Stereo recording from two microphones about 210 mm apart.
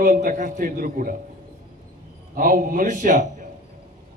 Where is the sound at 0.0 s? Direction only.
40° right (ahead or behind).